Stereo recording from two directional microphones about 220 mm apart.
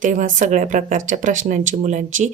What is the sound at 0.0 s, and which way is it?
Speech, 35° right (ahead or behind).